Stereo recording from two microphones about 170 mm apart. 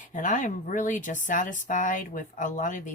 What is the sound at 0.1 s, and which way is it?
Speech, 45° left (ahead or behind).